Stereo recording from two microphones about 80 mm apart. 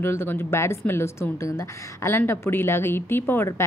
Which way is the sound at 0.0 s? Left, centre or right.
Left.